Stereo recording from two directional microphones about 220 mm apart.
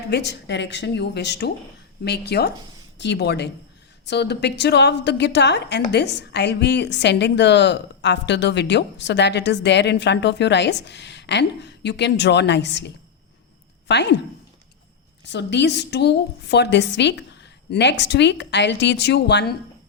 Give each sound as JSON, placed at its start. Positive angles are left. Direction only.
{"t": 0.1, "sound": "a woman's voice", "side_deg": 50}
{"t": 15.3, "sound": "a woman's voice", "side_deg": 50}